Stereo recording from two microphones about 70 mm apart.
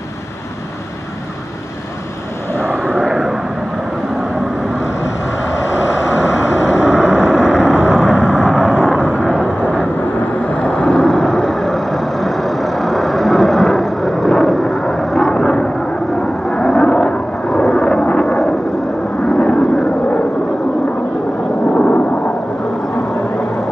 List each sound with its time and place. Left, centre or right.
2.7 s vehicle: centre
6.8 s vehicle: centre
9.5 s vehicle: left
10.5 s vehicle: centre
21.7 s a sound: left